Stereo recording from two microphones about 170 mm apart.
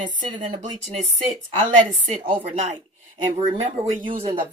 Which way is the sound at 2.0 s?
40° right (ahead or behind).